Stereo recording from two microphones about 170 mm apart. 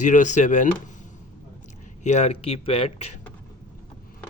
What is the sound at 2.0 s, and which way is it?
Speech, 40° left (ahead or behind).